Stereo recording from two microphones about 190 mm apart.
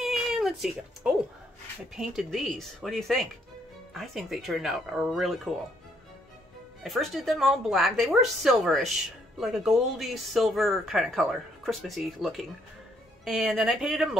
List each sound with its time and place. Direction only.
0.0 s music: centre (ahead or behind)
2.0 s speech: centre (ahead or behind)
6.8 s speech: centre (ahead or behind)